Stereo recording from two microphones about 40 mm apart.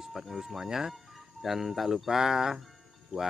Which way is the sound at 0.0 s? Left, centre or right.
Centre.